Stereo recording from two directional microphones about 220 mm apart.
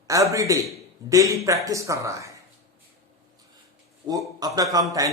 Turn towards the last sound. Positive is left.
turn(degrees=-15)  # may be behind; listen again after turning